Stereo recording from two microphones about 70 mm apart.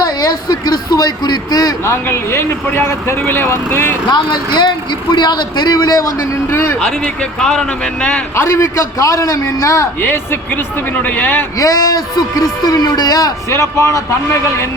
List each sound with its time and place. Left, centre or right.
0.0 s a man's voice: left
1.8 s speech: left
4.1 s a man's voice: left
6.5 s speech: left
6.7 s speech: centre
8.4 s a man's voice: left
10.0 s speech: left
11.5 s speech: left
13.5 s a man's voice: left